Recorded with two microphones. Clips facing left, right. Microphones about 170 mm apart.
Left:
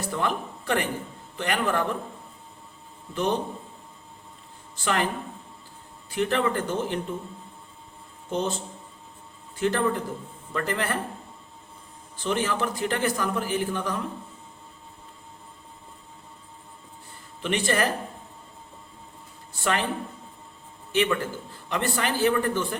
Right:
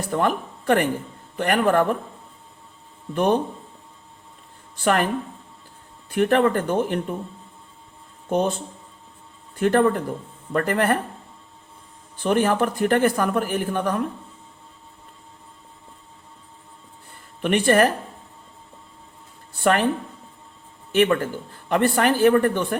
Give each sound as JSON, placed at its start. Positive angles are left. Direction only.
{"t": 0.1, "sound": "speech", "side_deg": -50}
{"t": 3.2, "sound": "speech", "side_deg": -55}
{"t": 4.8, "sound": "speech", "side_deg": -55}
{"t": 6.1, "sound": "speech", "side_deg": -55}
{"t": 8.3, "sound": "speech", "side_deg": -55}
{"t": 12.1, "sound": "speech", "side_deg": -55}
{"t": 17.4, "sound": "speech", "side_deg": -55}
{"t": 19.5, "sound": "speech", "side_deg": -55}
{"t": 20.9, "sound": "speech", "side_deg": -50}